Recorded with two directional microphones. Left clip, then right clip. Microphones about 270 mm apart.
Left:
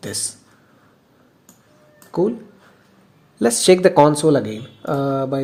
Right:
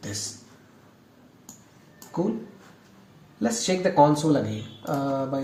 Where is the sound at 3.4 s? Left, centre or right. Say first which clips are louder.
Left 11 dB; left.